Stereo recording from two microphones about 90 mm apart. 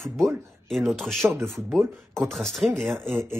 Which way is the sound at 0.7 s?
5° left (ahead or behind).